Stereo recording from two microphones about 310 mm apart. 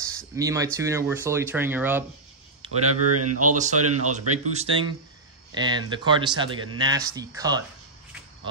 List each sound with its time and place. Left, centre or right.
0.0 s a sound: centre
0.7 s speech: centre
2.8 s speech: right
4.5 s speech: right